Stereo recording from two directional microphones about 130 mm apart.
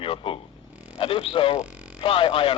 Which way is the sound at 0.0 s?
45° left (ahead or behind).